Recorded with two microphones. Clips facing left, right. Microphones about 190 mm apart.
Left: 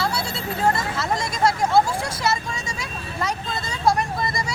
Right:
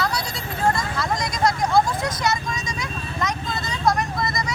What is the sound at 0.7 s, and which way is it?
Vehicle, 25° left (ahead or behind).